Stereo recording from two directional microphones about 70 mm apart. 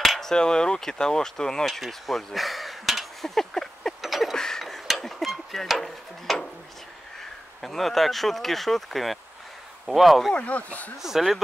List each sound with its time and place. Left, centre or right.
0.0 s speech: centre
4.0 s a sound: centre
7.6 s speech: centre
10.3 s speech: centre
11.0 s speech: centre